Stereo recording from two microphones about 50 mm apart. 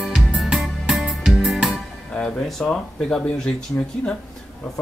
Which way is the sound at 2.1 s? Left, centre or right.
Left.